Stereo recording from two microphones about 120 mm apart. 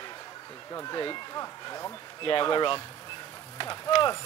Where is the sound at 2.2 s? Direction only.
45° left (ahead or behind).